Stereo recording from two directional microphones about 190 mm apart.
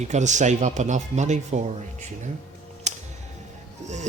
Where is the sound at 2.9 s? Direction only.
35° right (ahead or behind).